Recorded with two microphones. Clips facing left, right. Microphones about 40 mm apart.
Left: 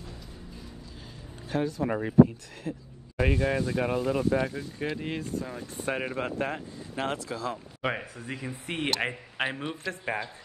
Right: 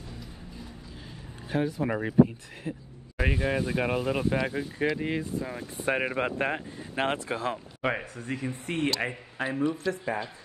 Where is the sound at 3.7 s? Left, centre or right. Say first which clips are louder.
Even; right.